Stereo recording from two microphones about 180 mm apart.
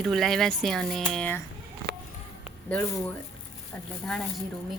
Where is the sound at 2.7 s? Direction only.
10° left (ahead or behind).